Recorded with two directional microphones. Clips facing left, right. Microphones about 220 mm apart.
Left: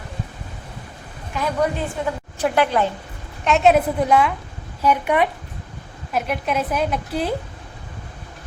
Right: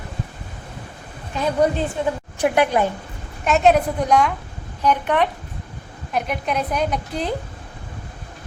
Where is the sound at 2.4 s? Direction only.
15° right (ahead or behind).